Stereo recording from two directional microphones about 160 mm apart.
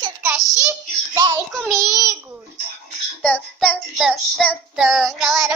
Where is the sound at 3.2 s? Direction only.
10° left (ahead or behind).